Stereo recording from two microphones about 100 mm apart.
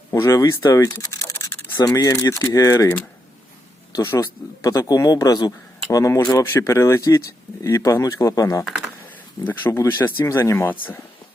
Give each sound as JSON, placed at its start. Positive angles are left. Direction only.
{"t": 0.1, "sound": "speech", "side_deg": 35}
{"t": 1.0, "sound": "mechanisms", "side_deg": 30}
{"t": 2.0, "sound": "a man's voice", "side_deg": 35}
{"t": 3.9, "sound": "a man's voice", "side_deg": 30}
{"t": 9.4, "sound": "speech", "side_deg": 20}